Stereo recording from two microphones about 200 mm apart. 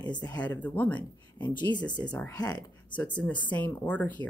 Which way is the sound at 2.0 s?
5° left (ahead or behind).